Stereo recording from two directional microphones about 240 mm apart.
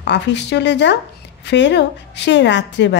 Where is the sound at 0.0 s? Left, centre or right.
Left.